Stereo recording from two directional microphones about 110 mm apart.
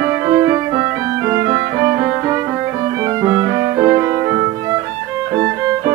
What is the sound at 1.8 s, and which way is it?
Violin, 25° right (ahead or behind).